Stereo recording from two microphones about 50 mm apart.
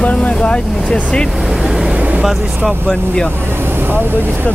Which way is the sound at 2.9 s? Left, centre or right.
Centre.